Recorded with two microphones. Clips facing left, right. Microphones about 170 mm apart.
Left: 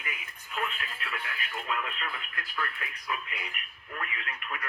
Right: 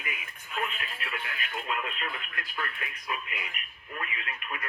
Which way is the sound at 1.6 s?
20° right (ahead or behind).